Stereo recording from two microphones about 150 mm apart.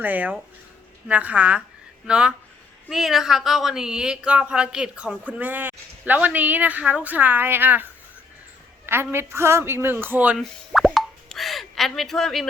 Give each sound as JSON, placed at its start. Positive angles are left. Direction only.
{"t": 0.0, "sound": "speech", "side_deg": -10}
{"t": 9.1, "sound": "speech", "side_deg": -15}
{"t": 10.4, "sound": "plop", "side_deg": 0}